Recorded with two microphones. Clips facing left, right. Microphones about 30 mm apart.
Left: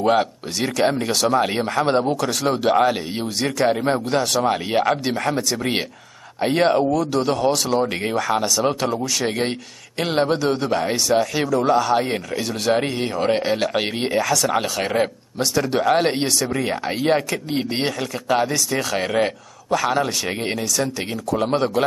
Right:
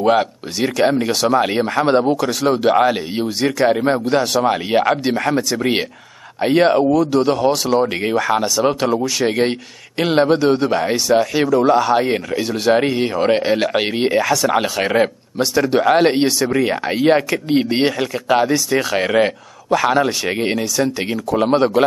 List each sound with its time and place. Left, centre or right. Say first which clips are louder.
0.0 s speech: right 3 dB; centre